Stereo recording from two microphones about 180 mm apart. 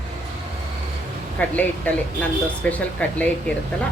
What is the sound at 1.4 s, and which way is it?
Speech, 10° left (ahead or behind).